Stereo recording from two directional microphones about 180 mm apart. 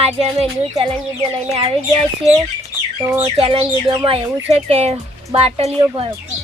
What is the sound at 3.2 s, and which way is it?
Speech, 35° right (ahead or behind).